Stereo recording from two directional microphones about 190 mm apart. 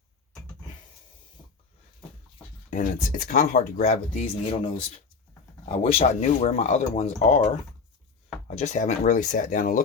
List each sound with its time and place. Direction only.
2.6 s speech: 45° left (ahead or behind)
4.5 s speech: 25° left (ahead or behind); by 9.8 s 45° left (ahead or behind)